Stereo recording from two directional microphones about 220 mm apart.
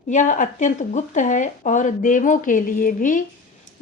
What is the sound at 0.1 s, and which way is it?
A woman's voice, 35° left (ahead or behind).